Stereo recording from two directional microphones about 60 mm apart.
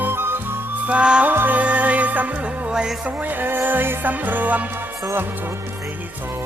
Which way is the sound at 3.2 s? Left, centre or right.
Right.